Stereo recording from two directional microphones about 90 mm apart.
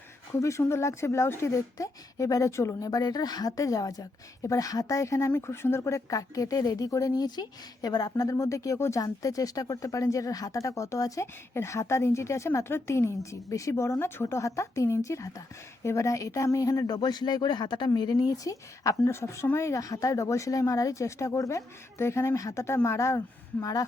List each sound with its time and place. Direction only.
0.3 s speech: 35° left (ahead or behind)